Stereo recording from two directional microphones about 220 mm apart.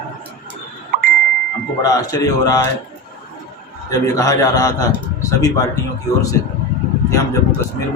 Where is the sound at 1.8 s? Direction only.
15° left (ahead or behind).